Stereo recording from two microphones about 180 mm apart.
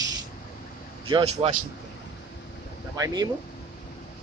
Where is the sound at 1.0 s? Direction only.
30° right (ahead or behind).